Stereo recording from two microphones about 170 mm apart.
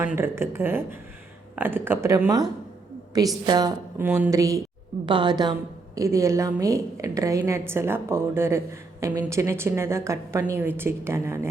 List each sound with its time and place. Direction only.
0.0 s a woman's voice: 10° right (ahead or behind)
3.9 s a woman's voice: 10° right (ahead or behind)